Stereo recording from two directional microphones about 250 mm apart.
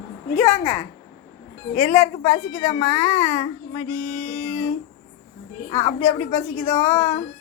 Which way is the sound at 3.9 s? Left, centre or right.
Left.